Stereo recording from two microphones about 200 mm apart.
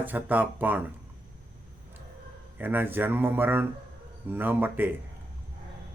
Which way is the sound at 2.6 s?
10° right (ahead or behind).